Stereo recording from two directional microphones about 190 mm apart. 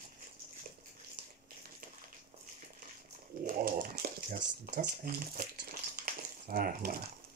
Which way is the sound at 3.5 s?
45° right (ahead or behind).